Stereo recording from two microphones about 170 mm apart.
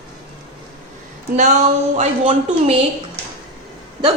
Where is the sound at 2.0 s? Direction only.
45° right (ahead or behind).